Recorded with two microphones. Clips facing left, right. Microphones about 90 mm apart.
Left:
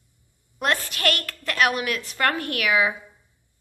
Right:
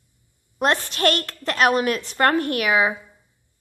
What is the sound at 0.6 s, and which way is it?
A woman's voice, 30° right (ahead or behind).